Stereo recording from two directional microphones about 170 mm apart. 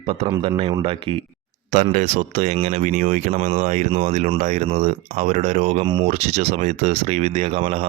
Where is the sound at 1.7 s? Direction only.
50° right (ahead or behind).